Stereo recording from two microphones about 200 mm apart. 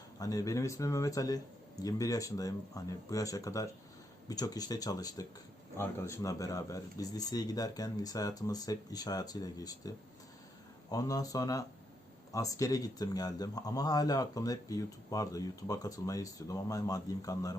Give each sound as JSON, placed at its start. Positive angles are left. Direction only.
{"t": 0.2, "sound": "speech", "side_deg": 15}
{"t": 10.9, "sound": "speech", "side_deg": 15}